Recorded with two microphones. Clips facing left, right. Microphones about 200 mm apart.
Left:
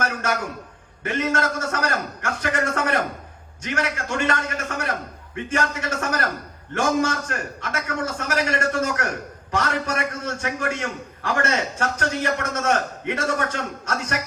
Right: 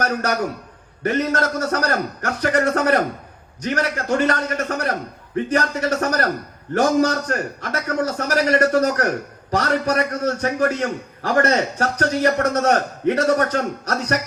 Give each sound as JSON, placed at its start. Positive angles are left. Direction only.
{"t": 0.0, "sound": "a man's voice", "side_deg": -40}